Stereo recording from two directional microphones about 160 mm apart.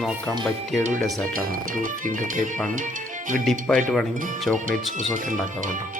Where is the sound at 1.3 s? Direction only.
60° right (ahead or behind).